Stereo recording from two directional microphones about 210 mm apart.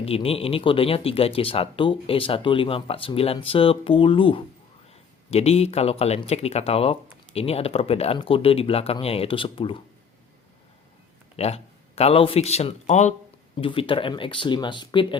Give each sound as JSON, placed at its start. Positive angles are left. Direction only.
{"t": 0.0, "sound": "speech", "side_deg": 30}
{"t": 11.3, "sound": "speech", "side_deg": 30}